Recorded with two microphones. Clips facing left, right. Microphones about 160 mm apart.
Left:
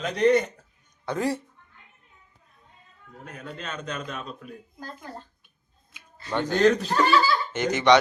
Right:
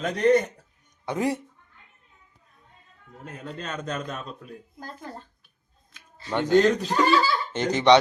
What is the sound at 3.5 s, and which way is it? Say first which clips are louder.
Speech: right 3 dB; 40° right (ahead or behind).